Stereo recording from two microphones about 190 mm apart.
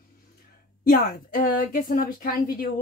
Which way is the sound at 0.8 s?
50° left (ahead or behind).